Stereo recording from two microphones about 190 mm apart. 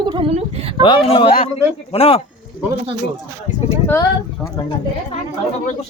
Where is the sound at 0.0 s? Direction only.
25° right (ahead or behind).